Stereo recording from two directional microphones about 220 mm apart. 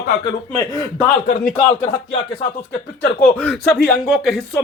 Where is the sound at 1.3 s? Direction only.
40° left (ahead or behind).